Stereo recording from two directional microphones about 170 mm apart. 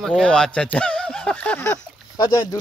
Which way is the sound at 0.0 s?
5° left (ahead or behind).